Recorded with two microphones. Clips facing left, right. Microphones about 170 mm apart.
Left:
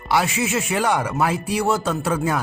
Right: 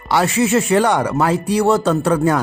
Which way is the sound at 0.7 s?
35° right (ahead or behind).